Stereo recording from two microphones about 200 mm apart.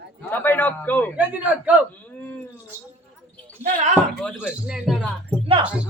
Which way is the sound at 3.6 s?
35° right (ahead or behind).